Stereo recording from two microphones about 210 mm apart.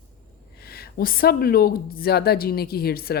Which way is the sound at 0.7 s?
45° left (ahead or behind).